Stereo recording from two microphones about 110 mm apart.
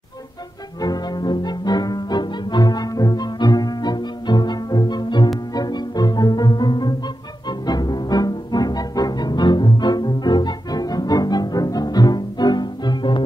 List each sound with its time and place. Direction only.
0.7 s music: 35° left (ahead or behind)